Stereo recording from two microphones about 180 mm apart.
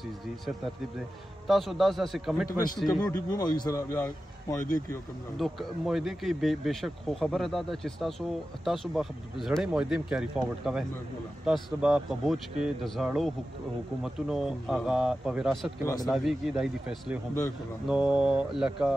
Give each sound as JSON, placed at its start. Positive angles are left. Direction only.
{"t": 1.5, "sound": "speech", "side_deg": 0}
{"t": 3.0, "sound": "a man's voice", "side_deg": 20}
{"t": 5.4, "sound": "speech", "side_deg": 0}
{"t": 15.8, "sound": "a man's voice", "side_deg": 20}
{"t": 16.1, "sound": "speech", "side_deg": 0}